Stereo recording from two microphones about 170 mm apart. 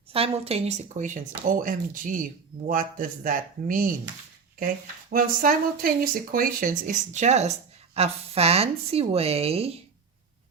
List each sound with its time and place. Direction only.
0.1 s speech: 35° right (ahead or behind); by 3.9 s 55° right (ahead or behind)
5.1 s speech: 55° right (ahead or behind); by 9.7 s 35° right (ahead or behind)